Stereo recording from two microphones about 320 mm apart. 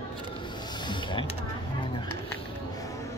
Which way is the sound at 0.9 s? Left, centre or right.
Centre.